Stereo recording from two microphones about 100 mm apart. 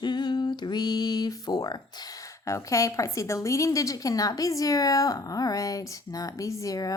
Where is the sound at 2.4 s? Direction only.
30° left (ahead or behind).